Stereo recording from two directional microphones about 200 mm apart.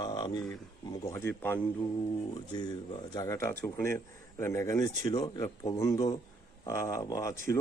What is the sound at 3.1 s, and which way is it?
Speech, 15° left (ahead or behind).